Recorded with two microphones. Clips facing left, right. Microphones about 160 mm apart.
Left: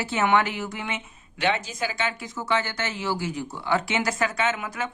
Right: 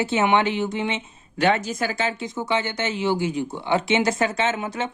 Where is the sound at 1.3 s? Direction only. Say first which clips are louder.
Right 5 dB; 45° right (ahead or behind).